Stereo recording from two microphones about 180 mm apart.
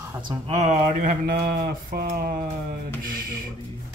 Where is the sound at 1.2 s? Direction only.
60° right (ahead or behind).